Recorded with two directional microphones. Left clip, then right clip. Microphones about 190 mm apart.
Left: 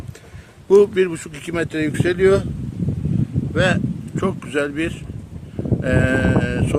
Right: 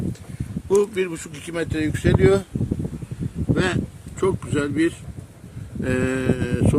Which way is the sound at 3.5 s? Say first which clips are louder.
Left 6 dB; 65° left (ahead or behind).